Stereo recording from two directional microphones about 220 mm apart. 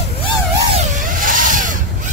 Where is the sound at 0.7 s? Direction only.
35° right (ahead or behind).